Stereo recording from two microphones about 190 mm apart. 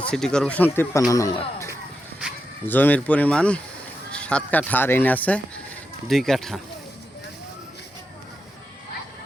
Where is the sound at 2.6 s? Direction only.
10° left (ahead or behind).